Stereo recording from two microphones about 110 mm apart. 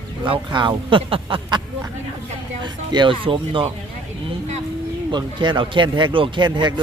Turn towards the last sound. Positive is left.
turn(degrees=-45)  # may be behind; listen again after turning